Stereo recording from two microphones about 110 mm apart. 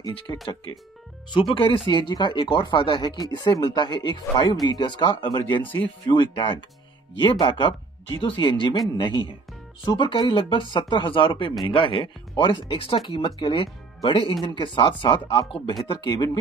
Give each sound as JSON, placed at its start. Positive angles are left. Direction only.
{"t": 0.3, "sound": "speech", "side_deg": 25}
{"t": 1.3, "sound": "speech", "side_deg": 50}
{"t": 5.6, "sound": "speech", "side_deg": 15}
{"t": 6.0, "sound": "speech", "side_deg": 45}
{"t": 12.7, "sound": "speech", "side_deg": 60}
{"t": 13.0, "sound": "speech", "side_deg": 45}